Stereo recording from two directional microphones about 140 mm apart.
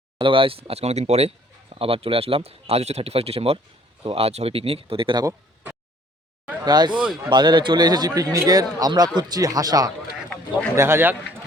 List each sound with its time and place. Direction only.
0.2 s speech: 40° right (ahead or behind)
6.7 s speech: 30° right (ahead or behind)
7.0 s speech: 10° right (ahead or behind)
7.3 s a man's voice: 30° right (ahead or behind); by 11.2 s 15° right (ahead or behind)